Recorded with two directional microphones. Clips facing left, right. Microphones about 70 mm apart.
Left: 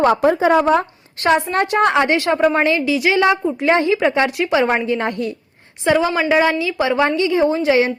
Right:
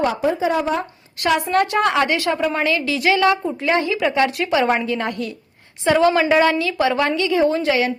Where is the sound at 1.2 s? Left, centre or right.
Left.